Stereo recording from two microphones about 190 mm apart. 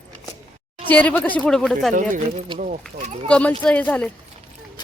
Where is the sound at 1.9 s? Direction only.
45° right (ahead or behind).